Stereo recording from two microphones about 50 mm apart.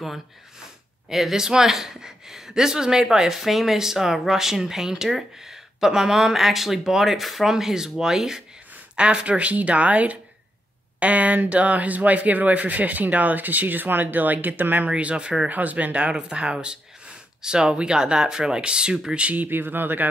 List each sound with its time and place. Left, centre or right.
1.0 s speech: centre
8.9 s speech: right
14.9 s speech: right
15.5 s speech: right